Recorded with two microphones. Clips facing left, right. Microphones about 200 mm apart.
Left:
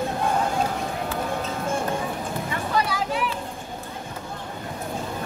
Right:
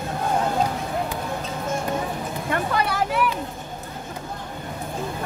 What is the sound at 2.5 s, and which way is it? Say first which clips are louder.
Speech: right 3 dB; 55° right (ahead or behind).